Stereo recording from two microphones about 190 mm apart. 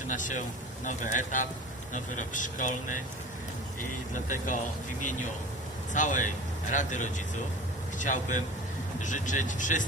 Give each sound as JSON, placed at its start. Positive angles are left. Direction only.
{"t": 0.1, "sound": "speech", "side_deg": 40}
{"t": 4.1, "sound": "speech", "side_deg": 40}
{"t": 5.9, "sound": "speech", "side_deg": 40}